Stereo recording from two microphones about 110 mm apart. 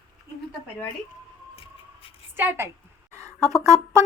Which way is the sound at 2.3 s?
20° right (ahead or behind).